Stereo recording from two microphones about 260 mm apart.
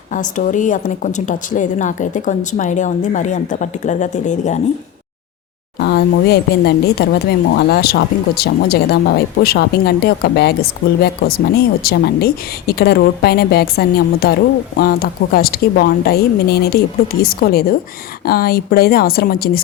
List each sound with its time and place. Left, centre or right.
0.1 s a woman's voice: left
5.8 s speech: left